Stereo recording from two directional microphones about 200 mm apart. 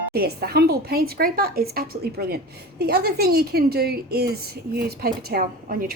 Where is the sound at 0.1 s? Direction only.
50° right (ahead or behind).